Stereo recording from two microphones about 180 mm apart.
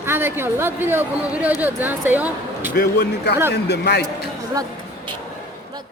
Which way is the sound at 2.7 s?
65° left (ahead or behind).